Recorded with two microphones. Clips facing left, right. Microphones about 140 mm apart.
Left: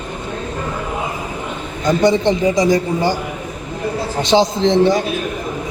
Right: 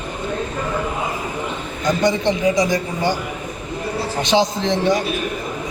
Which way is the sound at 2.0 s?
30° left (ahead or behind).